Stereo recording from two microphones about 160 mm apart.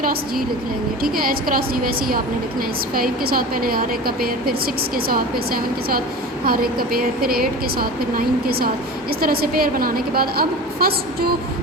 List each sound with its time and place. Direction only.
1.0 s a woman's voice: 65° right (ahead or behind)